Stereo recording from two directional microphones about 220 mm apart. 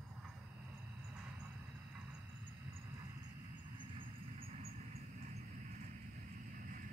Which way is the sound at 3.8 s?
25° right (ahead or behind).